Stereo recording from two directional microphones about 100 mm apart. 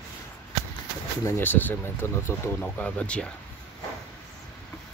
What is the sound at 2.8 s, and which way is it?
Speech, 15° left (ahead or behind).